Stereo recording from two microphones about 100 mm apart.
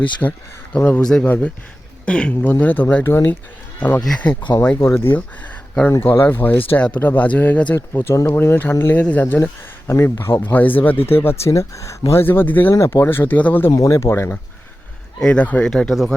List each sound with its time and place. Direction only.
0.2 s speech: 15° left (ahead or behind)
1.0 s speech: 5° left (ahead or behind)
7.8 s speech: 30° left (ahead or behind)
13.7 s speech: 30° left (ahead or behind)
15.2 s speech: 10° left (ahead or behind)